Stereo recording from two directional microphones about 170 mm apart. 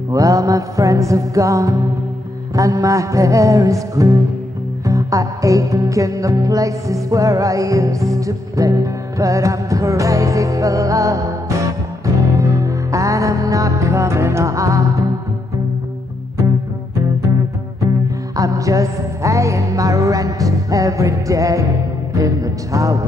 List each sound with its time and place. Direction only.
0.1 s music: 20° right (ahead or behind)
18.3 s music: 20° right (ahead or behind)